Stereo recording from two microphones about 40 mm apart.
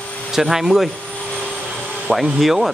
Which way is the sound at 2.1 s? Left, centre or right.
Centre.